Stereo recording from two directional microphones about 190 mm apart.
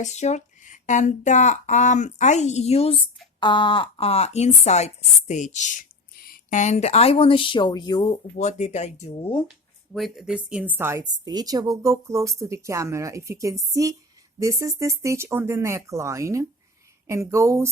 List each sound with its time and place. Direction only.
0.0 s speech: 35° left (ahead or behind)
8.4 s speech: 40° left (ahead or behind)
9.9 s a woman's voice: centre (ahead or behind)